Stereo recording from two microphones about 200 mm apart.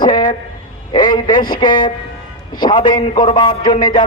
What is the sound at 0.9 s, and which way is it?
A man's voice, 20° left (ahead or behind).